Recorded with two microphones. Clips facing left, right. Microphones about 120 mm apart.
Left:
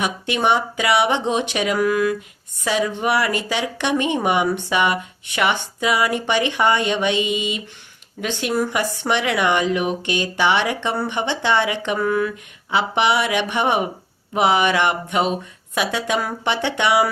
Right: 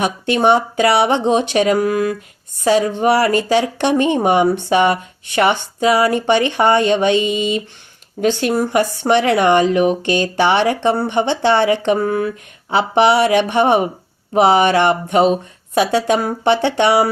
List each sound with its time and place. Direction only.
0.0 s speech: 35° right (ahead or behind)